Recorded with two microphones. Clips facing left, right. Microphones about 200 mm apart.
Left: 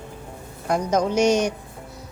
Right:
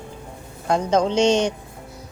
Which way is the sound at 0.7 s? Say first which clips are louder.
Right 2 dB; 25° right (ahead or behind).